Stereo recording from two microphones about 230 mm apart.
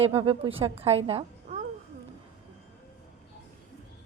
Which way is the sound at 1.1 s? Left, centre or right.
Right.